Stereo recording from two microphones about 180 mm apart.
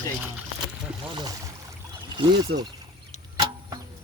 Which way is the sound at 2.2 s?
25° right (ahead or behind).